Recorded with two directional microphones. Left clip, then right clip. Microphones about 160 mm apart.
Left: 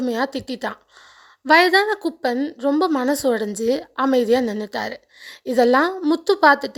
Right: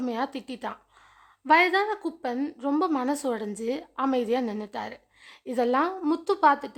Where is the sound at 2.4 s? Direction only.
20° left (ahead or behind).